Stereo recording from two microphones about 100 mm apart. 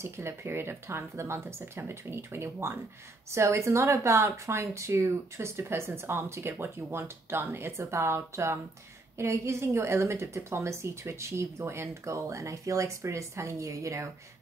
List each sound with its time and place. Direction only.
0.0 s speech: 25° right (ahead or behind)